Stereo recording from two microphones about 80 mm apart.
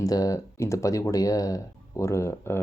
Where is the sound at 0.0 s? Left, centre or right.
Left.